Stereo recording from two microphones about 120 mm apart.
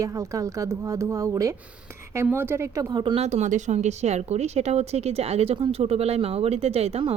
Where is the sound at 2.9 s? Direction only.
40° right (ahead or behind).